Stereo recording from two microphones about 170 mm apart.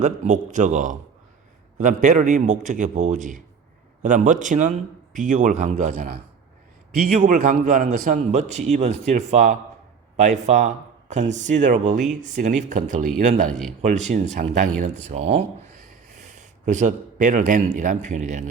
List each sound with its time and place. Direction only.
0.0 s a man's voice: 45° right (ahead or behind)